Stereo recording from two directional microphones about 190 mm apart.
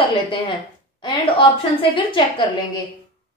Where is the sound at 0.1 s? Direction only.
25° left (ahead or behind).